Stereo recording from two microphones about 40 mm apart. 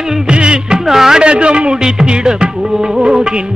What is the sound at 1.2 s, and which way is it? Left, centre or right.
Music, right.